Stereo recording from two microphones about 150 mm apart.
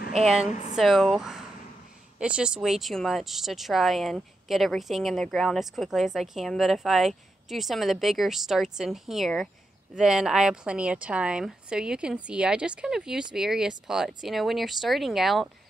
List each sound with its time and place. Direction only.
0.5 s speech: 50° left (ahead or behind)
0.7 s speech: centre (ahead or behind)